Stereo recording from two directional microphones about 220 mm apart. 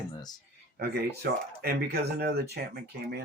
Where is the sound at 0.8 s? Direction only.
50° right (ahead or behind).